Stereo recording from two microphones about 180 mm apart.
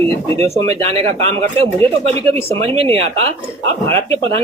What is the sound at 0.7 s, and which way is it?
Speech, 35° right (ahead or behind).